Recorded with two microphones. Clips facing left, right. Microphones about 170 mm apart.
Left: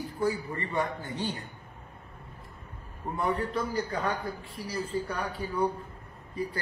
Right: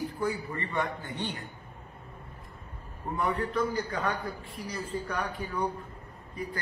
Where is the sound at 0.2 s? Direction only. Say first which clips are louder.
Left 5 dB; 30° left (ahead or behind).